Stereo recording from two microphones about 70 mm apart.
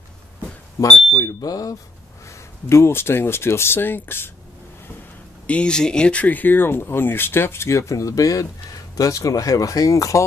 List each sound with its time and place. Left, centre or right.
1.1 s speech: left
2.2 s speech: left
5.5 s speech: centre; by 10.2 s left